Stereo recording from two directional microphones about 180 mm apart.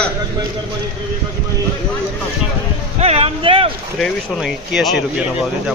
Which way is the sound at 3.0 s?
35° right (ahead or behind).